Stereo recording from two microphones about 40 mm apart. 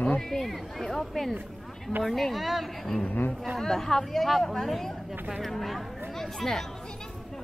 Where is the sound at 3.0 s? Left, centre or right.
Left.